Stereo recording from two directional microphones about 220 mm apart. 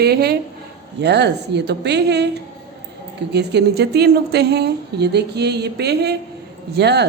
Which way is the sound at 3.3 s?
50° right (ahead or behind).